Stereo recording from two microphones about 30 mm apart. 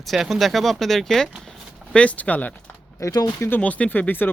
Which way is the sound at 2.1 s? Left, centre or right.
Left.